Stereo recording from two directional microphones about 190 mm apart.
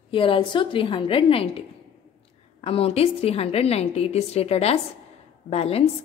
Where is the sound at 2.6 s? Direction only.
30° left (ahead or behind).